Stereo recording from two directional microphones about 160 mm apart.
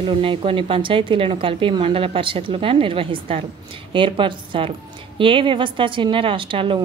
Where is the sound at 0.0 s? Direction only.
35° right (ahead or behind).